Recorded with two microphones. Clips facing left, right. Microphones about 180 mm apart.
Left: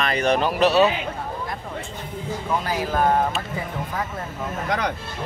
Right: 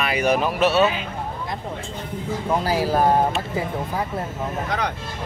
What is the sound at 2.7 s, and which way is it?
Speech, 35° right (ahead or behind).